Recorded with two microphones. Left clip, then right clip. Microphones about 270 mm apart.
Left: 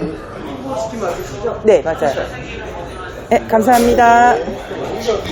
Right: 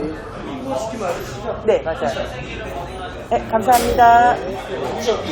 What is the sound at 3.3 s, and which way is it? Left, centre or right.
A woman's voice, left.